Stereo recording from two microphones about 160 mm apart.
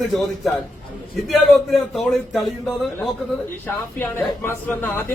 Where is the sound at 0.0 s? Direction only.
Centre (ahead or behind).